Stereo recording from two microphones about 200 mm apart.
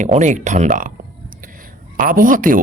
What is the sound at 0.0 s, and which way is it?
Speech, 35° right (ahead or behind).